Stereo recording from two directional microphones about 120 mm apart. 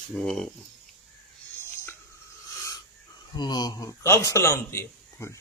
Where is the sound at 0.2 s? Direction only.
5° left (ahead or behind).